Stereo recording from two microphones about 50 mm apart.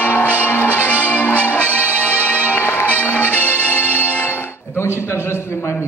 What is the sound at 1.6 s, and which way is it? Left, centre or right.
Music, right.